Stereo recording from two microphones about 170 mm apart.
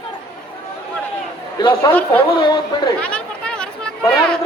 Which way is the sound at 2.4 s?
25° left (ahead or behind).